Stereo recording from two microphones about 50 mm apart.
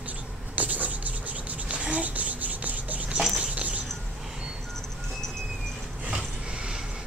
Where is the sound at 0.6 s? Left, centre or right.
Right.